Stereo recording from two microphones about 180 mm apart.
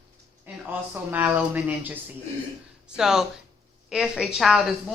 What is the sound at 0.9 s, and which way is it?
Speech, 10° right (ahead or behind).